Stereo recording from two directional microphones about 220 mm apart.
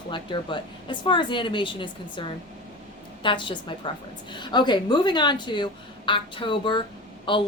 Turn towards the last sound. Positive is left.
turn(degrees=20)  # may be behind; listen again after turning